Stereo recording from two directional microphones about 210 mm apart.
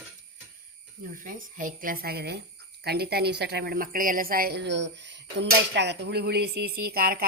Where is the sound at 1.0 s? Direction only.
40° right (ahead or behind).